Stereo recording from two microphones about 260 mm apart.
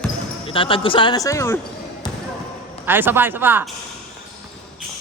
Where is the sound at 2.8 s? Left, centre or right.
Centre.